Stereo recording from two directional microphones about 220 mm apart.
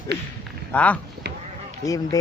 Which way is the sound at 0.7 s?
5° left (ahead or behind).